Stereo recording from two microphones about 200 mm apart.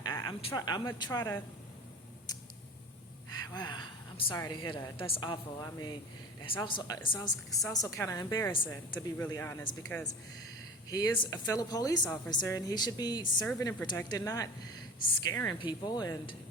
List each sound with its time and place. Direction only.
0.0 s speech: 20° left (ahead or behind)
3.2 s a woman's voice: 20° left (ahead or behind)
10.8 s a woman's voice: 20° left (ahead or behind)